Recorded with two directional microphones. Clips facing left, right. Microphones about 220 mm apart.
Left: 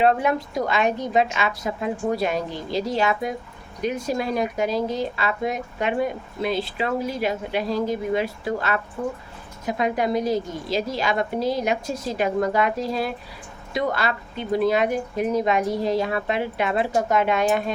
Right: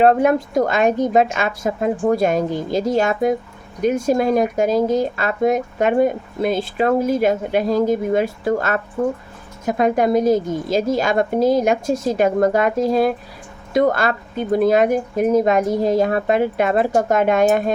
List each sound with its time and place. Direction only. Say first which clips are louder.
0.0 s speech: right 6 dB; 45° right (ahead or behind)